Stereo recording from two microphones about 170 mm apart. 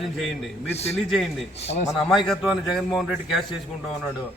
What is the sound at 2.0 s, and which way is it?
A man's voice, centre (ahead or behind).